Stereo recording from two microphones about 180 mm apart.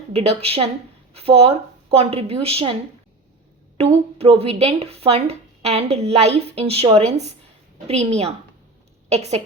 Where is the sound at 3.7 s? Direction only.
35° right (ahead or behind).